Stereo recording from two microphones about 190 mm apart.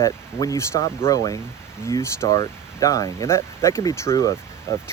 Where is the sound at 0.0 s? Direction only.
20° left (ahead or behind).